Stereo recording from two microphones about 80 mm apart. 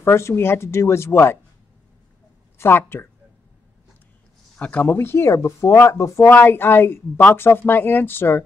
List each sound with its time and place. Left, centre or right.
0.0 s speech: left
2.6 s speech: left
4.6 s speech: centre; by 6.3 s left
6.3 s speech: left